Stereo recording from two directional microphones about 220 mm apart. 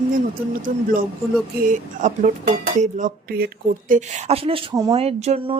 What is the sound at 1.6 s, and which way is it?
Speech, 35° right (ahead or behind).